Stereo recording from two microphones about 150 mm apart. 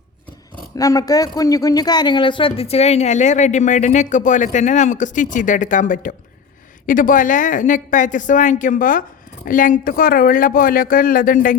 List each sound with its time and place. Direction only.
0.8 s a woman's voice: 25° left (ahead or behind); by 11.5 s 70° left (ahead or behind)